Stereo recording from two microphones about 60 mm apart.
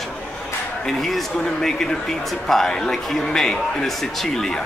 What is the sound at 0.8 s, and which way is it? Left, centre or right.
Speech, centre.